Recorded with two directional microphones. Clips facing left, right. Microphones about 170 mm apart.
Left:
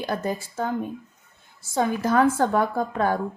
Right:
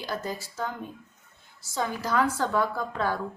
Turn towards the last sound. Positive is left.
turn(degrees=50)  # may be behind; listen again after turning